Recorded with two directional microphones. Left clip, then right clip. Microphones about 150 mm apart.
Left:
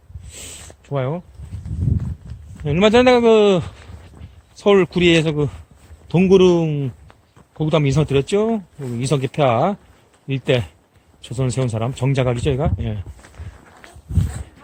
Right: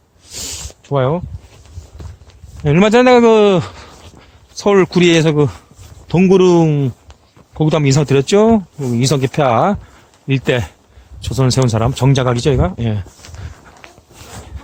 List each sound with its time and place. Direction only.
0.9 s speech: 60° right (ahead or behind)
2.6 s speech: 60° right (ahead or behind)
6.1 s speech: 70° right (ahead or behind); by 13.1 s 50° right (ahead or behind)